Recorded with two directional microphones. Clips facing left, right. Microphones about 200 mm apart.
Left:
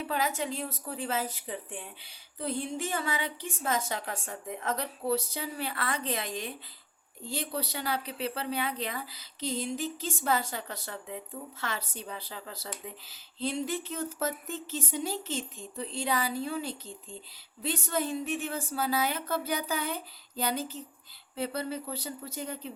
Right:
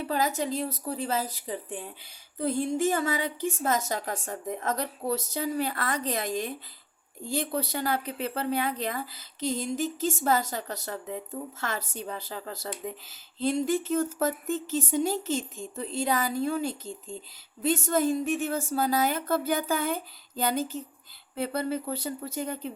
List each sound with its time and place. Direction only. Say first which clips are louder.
0.1 s a woman's voice: right 4 dB; 40° right (ahead or behind)